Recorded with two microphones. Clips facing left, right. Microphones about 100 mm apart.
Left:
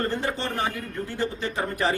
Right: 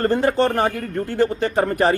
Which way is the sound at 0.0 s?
50° right (ahead or behind).